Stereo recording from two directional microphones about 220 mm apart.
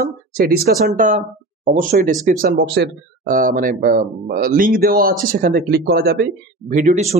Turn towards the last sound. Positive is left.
turn(degrees=-30)  # may be behind; listen again after turning